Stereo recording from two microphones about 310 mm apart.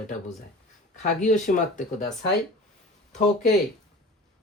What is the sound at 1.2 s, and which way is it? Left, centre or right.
Speech, left.